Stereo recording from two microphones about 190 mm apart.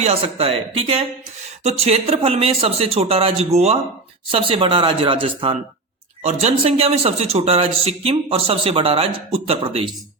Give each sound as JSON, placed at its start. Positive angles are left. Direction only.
{"t": 0.0, "sound": "speech", "side_deg": -30}